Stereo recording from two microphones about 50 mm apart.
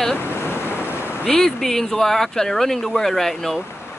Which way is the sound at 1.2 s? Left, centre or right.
Centre.